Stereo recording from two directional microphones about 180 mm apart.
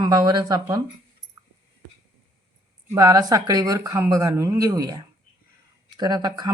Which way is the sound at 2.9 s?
20° right (ahead or behind).